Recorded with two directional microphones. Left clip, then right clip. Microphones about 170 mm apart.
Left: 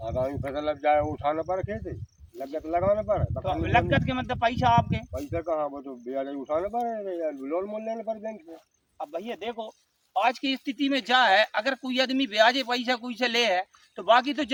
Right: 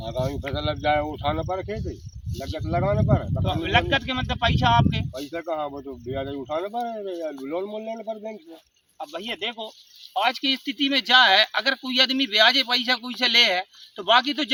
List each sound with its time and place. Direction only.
0.0 s a sound: 10° left (ahead or behind)
0.4 s speech: 15° left (ahead or behind)
2.3 s speech: 25° left (ahead or behind)
3.4 s speech: 25° left (ahead or behind)
5.3 s speech: 10° left (ahead or behind)
6.9 s speech: 10° left (ahead or behind)
9.0 s speech: 20° left (ahead or behind)